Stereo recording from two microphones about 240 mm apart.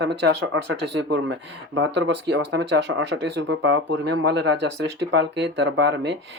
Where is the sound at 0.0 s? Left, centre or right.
Right.